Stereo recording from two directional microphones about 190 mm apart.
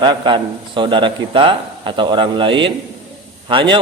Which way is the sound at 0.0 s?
25° right (ahead or behind).